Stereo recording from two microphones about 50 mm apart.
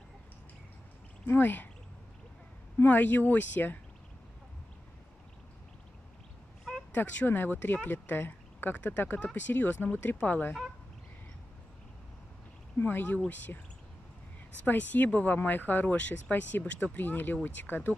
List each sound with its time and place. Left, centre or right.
1.2 s speech: left
2.8 s speech: left
6.9 s speech: left
12.7 s speech: left
14.6 s speech: left